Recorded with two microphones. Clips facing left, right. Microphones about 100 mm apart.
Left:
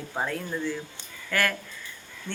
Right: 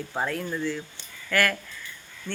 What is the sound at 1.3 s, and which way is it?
Speech, 20° left (ahead or behind).